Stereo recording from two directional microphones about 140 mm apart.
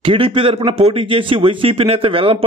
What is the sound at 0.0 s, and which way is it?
A man's voice, 40° right (ahead or behind).